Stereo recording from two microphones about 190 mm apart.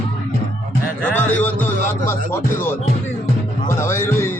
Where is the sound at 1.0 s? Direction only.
5° left (ahead or behind).